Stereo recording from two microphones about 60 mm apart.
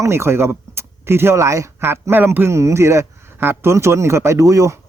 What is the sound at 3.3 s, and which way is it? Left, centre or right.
Speech, right.